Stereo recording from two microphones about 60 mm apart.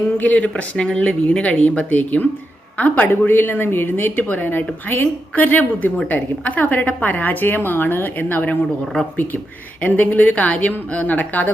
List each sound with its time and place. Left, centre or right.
0.2 s a woman's voice: left
9.8 s speech: left